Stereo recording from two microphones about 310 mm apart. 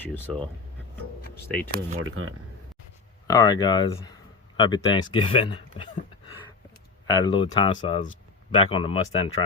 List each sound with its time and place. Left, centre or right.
0.0 s speech: centre
1.7 s speech: right
3.2 s speech: centre